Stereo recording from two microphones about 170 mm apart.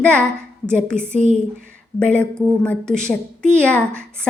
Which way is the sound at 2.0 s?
5° left (ahead or behind).